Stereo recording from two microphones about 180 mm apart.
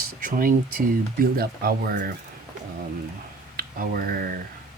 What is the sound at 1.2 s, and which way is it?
Speech, 55° right (ahead or behind).